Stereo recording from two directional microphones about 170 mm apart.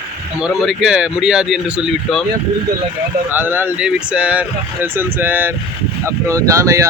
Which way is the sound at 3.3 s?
10° right (ahead or behind).